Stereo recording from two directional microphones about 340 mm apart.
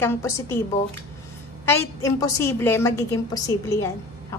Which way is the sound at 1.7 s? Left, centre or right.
Centre.